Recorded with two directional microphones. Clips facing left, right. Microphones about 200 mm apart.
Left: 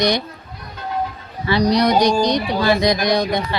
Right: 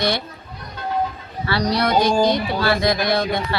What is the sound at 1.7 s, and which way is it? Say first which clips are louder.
Speech: even; 15° left (ahead or behind).